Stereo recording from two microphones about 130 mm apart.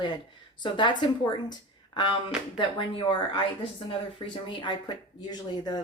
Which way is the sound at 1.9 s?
35° left (ahead or behind).